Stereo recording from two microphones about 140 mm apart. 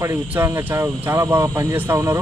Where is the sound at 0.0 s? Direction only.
20° right (ahead or behind).